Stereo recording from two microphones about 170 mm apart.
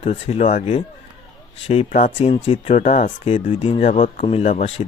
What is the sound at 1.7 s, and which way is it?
Speech, 40° left (ahead or behind).